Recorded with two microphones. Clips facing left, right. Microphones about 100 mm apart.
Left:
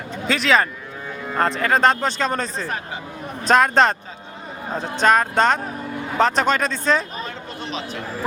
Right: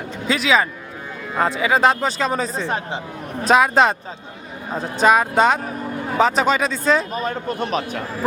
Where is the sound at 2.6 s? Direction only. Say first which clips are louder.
Right 4 dB; 25° right (ahead or behind).